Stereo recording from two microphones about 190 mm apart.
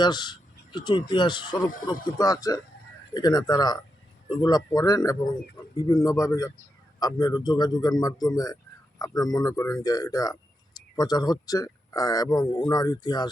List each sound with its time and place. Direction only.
0.0 s a man's voice: 25° left (ahead or behind)